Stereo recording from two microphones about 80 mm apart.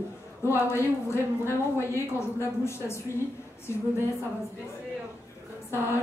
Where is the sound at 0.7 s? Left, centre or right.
Left.